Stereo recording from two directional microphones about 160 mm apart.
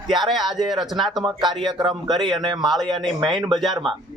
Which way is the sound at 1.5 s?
30° right (ahead or behind).